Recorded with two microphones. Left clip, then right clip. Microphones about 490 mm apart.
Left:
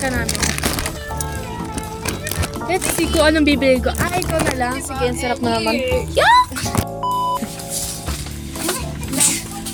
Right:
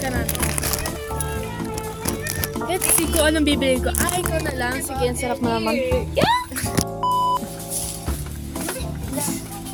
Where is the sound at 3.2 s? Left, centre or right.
Right.